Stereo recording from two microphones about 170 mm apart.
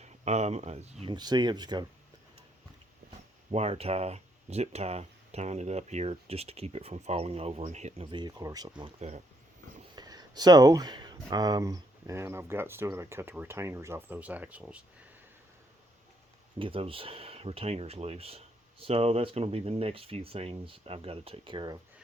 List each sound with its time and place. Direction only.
0.0 s speech: 40° right (ahead or behind)
1.1 s speech: 25° right (ahead or behind)
3.5 s speech: 35° right (ahead or behind)
8.1 s speech: 25° right (ahead or behind)
8.8 s speech: 40° right (ahead or behind)
9.9 s speech: 25° right (ahead or behind); by 14.8 s 5° right (ahead or behind)
16.6 s speech: 30° right (ahead or behind)